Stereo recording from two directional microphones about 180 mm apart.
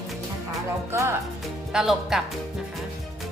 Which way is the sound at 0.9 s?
15° right (ahead or behind).